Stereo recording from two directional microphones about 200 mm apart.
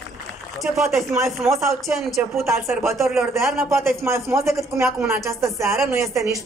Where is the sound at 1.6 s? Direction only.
15° right (ahead or behind).